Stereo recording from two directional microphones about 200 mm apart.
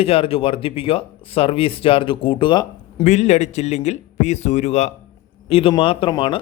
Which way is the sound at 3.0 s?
35° left (ahead or behind).